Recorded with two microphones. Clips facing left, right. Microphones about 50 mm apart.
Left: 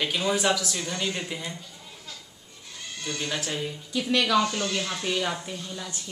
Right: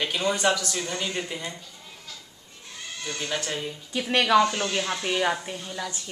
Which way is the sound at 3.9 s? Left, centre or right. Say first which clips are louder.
Right 3 dB; right.